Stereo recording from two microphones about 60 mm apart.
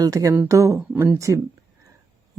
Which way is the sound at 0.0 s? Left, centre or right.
Right.